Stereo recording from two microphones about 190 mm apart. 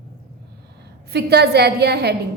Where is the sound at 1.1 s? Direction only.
60° right (ahead or behind).